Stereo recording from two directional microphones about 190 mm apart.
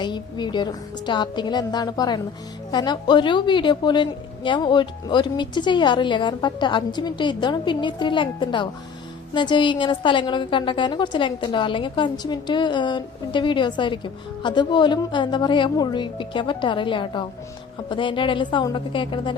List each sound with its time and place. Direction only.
0.0 s a woman's voice: 25° left (ahead or behind)